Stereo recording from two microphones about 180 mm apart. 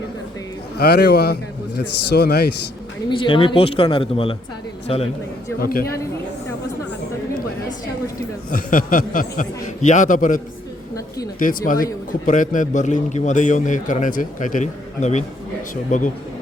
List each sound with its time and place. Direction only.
0.8 s a man's voice: 65° left (ahead or behind)
3.1 s a man's voice: 25° left (ahead or behind)
5.5 s a man's voice: 55° left (ahead or behind)
8.4 s a man's voice: 50° left (ahead or behind)